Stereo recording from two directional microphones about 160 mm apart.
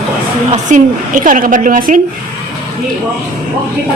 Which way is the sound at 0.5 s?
55° right (ahead or behind).